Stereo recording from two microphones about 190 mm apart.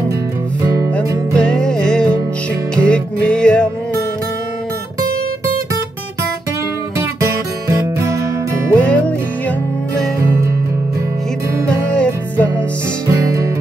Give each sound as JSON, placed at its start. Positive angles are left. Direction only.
{"t": 0.9, "sound": "music", "side_deg": 5}
{"t": 7.2, "sound": "music", "side_deg": -15}
{"t": 8.7, "sound": "music", "side_deg": 5}
{"t": 11.9, "sound": "music", "side_deg": 5}
{"t": 13.0, "sound": "music", "side_deg": -15}